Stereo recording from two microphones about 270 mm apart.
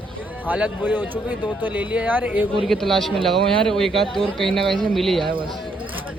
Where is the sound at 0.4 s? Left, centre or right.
Centre.